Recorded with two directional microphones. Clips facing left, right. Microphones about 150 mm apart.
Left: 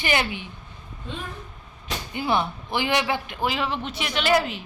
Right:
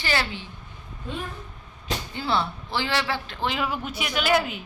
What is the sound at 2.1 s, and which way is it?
Speech, 15° left (ahead or behind).